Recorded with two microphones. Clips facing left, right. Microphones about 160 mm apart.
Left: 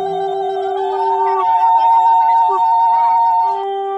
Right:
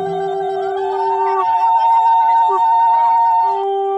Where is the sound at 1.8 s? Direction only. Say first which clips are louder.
Left 1 dB; centre (ahead or behind).